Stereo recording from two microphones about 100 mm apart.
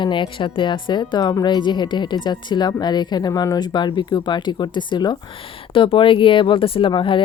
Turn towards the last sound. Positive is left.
turn(degrees=60)  # may be behind; listen again after turning